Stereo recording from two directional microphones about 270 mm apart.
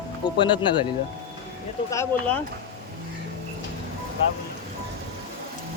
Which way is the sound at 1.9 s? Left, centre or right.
Centre.